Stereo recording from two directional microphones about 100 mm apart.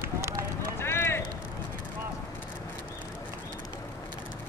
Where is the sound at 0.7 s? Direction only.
25° left (ahead or behind).